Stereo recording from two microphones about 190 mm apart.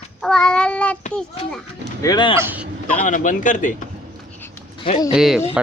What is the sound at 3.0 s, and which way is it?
Speech, 40° left (ahead or behind).